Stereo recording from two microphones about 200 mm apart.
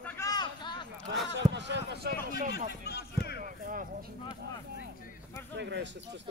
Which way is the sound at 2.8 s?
55° left (ahead or behind).